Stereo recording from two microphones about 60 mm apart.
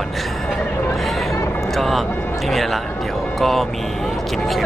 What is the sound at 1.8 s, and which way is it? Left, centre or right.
Speech, centre.